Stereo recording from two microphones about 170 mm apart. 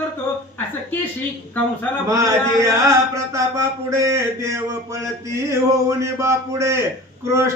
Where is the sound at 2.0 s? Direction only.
20° right (ahead or behind).